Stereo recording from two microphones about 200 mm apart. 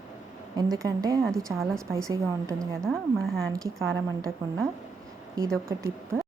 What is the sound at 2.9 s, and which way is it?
Speech, centre (ahead or behind).